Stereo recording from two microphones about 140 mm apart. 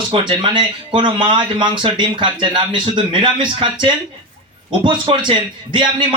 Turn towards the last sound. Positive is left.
turn(degrees=-35)  # may be behind; listen again after turning